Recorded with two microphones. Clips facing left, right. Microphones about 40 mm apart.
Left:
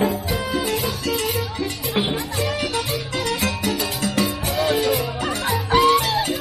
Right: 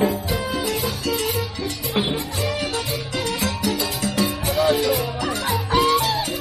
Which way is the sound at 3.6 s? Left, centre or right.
Left.